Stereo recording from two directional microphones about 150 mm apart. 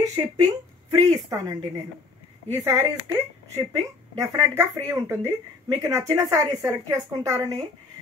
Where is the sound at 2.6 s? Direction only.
20° right (ahead or behind).